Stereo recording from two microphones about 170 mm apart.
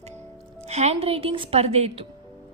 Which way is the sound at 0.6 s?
40° right (ahead or behind).